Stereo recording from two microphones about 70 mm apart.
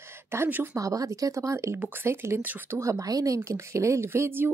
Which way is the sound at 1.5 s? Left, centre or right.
Right.